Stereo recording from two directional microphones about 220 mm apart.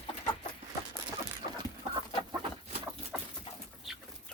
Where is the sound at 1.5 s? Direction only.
20° right (ahead or behind).